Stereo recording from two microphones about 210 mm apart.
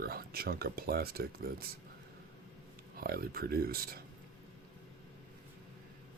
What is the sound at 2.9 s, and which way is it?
Speech, 45° right (ahead or behind).